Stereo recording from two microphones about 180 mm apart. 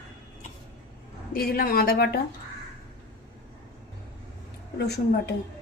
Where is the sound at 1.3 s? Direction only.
55° left (ahead or behind).